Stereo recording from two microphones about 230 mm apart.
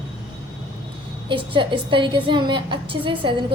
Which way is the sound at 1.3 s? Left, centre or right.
Right.